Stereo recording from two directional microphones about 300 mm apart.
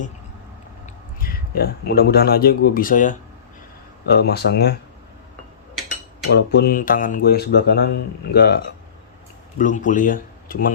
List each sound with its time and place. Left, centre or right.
1.2 s speech: left
6.3 s speech: left